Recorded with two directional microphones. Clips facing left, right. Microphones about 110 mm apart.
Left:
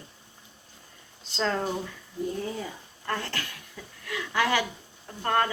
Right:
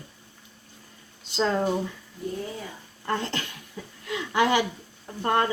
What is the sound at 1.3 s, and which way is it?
Speech, 15° right (ahead or behind).